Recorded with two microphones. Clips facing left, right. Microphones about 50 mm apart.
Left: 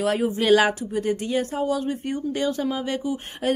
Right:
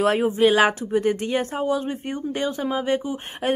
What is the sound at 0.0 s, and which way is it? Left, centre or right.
Speech, right.